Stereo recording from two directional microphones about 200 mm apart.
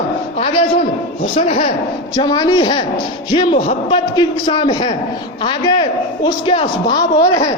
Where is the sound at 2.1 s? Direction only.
20° left (ahead or behind).